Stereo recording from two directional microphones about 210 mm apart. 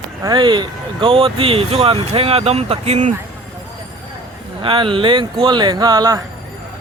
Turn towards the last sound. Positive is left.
turn(degrees=-15)  # may be behind; listen again after turning